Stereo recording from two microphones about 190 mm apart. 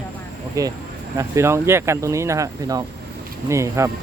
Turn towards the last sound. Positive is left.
turn(degrees=-15)  # may be behind; listen again after turning